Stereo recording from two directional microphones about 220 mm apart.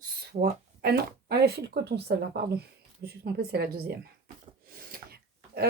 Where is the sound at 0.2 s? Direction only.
45° right (ahead or behind).